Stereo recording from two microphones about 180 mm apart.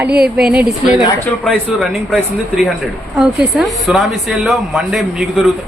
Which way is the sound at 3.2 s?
Centre (ahead or behind).